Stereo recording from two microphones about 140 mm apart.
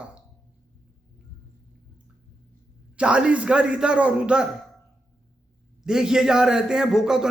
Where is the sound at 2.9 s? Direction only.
5° right (ahead or behind).